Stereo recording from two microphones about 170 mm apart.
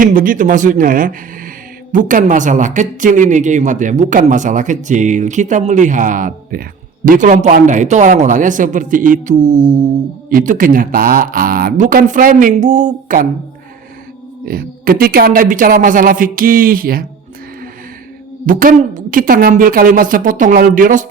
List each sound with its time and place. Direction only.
0.0 s a woman's voice: 55° right (ahead or behind)
14.4 s speech: 60° right (ahead or behind)
18.4 s speech: 55° right (ahead or behind)